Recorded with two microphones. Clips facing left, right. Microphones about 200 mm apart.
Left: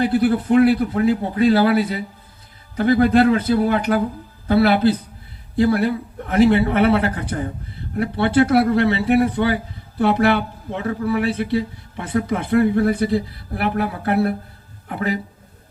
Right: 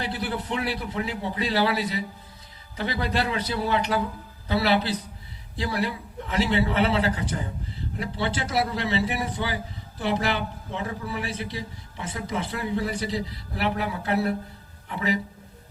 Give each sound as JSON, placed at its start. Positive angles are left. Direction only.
{"t": 0.0, "sound": "a man's voice", "side_deg": 55}